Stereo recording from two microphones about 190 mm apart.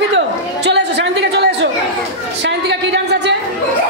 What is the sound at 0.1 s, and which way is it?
Chatter, 65° right (ahead or behind).